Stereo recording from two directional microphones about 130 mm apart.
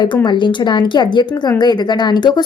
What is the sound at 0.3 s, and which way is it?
A woman's voice, 35° left (ahead or behind).